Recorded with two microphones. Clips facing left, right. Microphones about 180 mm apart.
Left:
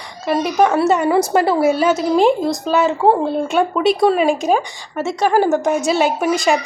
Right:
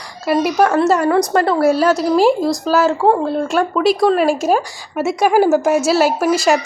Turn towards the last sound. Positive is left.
turn(degrees=0)  # may be behind; listen again after turning